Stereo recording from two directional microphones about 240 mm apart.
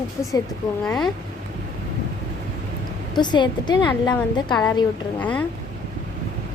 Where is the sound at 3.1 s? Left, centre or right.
Centre.